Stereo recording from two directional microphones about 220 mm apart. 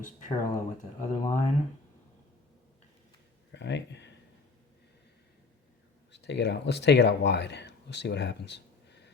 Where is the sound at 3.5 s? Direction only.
50° left (ahead or behind).